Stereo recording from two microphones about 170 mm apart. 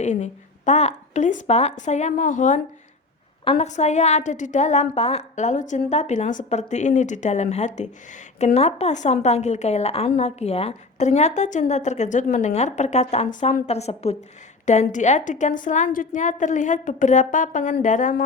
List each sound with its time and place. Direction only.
0.0 s a woman's voice: 45° left (ahead or behind)